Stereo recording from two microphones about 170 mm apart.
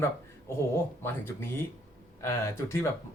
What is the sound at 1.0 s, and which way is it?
Speech, 15° left (ahead or behind).